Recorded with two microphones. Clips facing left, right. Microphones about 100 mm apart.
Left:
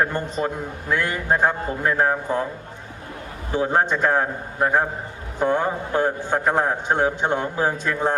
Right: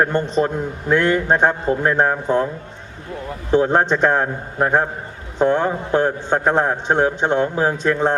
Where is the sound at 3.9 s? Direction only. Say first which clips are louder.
Right 3 dB; 25° right (ahead or behind).